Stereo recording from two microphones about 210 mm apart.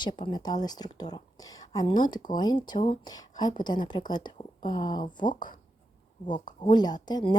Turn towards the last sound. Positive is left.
turn(degrees=20)  # may be behind; listen again after turning